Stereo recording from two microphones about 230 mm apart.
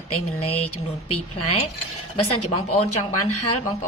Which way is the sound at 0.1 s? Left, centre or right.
Left.